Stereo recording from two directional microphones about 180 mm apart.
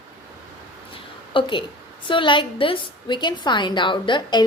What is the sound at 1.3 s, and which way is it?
A woman's voice, 30° left (ahead or behind).